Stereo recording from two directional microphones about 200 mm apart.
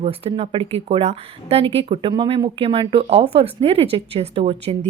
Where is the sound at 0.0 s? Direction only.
30° right (ahead or behind).